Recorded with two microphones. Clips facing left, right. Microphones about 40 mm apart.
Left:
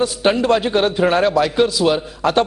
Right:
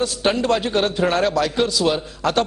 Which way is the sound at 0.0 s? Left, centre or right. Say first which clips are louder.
Left 3 dB; centre.